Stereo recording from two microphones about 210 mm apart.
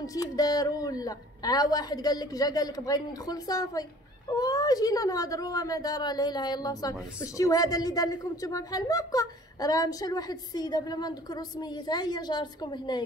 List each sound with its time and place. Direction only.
0.0 s a woman's voice: 15° left (ahead or behind)